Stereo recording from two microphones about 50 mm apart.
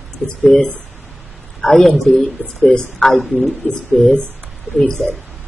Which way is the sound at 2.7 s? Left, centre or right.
Centre.